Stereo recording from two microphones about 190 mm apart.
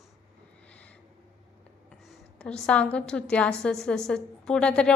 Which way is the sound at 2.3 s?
5° left (ahead or behind).